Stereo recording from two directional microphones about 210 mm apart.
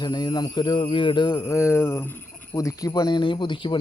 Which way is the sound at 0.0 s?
20° left (ahead or behind).